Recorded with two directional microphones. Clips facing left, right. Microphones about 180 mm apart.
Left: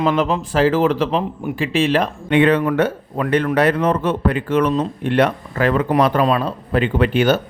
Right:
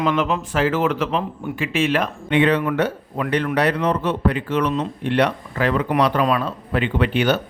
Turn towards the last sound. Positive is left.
turn(degrees=40)  # may be behind; listen again after turning